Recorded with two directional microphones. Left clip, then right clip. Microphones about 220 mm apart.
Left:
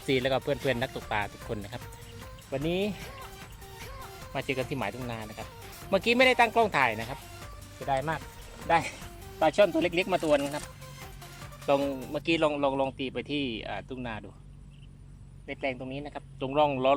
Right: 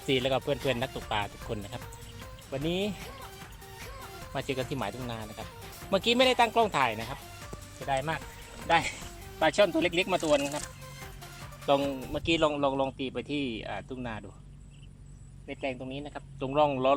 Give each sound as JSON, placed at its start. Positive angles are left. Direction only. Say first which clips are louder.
{"t": 0.0, "sound": "speech", "louder": "left 1 dB", "side_deg": 0}
{"t": 11.6, "sound": "speech", "louder": "even", "side_deg": -15}
{"t": 11.9, "sound": "speech", "louder": "left 1 dB", "side_deg": 0}
{"t": 12.2, "sound": "speech", "louder": "even", "side_deg": -15}
{"t": 15.4, "sound": "speech", "louder": "left 2 dB", "side_deg": -10}